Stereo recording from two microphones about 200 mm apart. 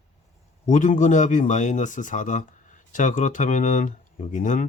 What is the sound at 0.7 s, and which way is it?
Speech, 40° left (ahead or behind).